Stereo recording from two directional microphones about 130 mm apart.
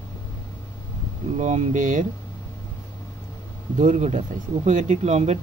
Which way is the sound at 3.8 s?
60° right (ahead or behind).